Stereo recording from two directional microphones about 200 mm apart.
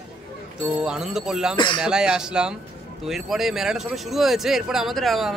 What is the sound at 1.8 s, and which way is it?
Speech, 5° right (ahead or behind).